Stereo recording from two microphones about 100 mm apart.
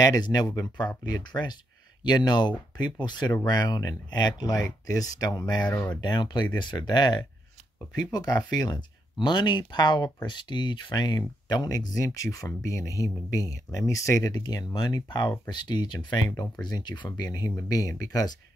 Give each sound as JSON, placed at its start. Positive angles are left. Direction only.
{"t": 0.0, "sound": "speech", "side_deg": 40}
{"t": 5.6, "sound": "speech", "side_deg": 15}
{"t": 5.9, "sound": "speech", "side_deg": 45}